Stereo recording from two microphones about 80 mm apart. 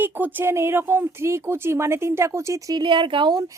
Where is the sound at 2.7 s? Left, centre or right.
Right.